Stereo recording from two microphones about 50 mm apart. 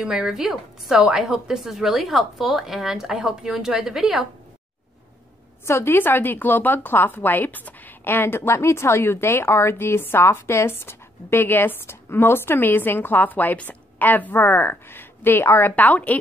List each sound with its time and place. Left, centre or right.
0.0 s a woman's voice: centre
5.7 s a woman's voice: left
5.9 s speech: left
15.7 s a woman's voice: left